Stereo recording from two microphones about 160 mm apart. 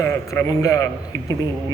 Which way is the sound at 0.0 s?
20° left (ahead or behind).